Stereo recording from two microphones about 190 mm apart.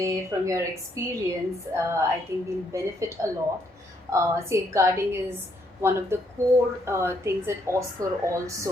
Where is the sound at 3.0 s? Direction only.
15° right (ahead or behind).